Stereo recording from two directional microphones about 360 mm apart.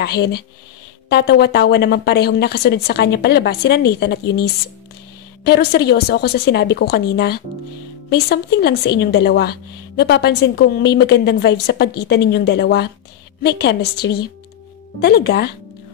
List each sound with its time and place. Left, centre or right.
0.0 s speech: left